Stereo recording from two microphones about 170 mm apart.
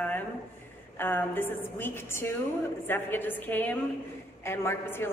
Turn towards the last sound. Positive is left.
turn(degrees=15)  # may be behind; listen again after turning